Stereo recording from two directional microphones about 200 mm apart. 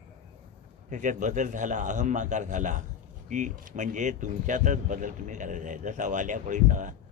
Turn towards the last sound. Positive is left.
turn(degrees=-40)  # may be behind; listen again after turning